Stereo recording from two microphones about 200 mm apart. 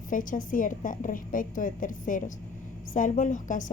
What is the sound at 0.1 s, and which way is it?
A woman's voice, 40° left (ahead or behind).